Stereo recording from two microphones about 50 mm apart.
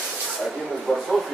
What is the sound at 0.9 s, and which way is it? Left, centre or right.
Speech, centre.